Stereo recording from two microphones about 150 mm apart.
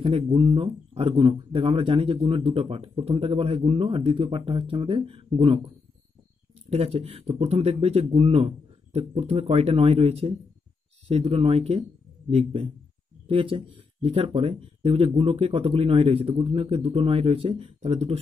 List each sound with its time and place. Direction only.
0.0 s speech: 35° right (ahead or behind)
6.7 s speech: 40° right (ahead or behind)